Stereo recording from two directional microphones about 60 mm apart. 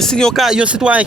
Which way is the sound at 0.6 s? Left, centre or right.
Right.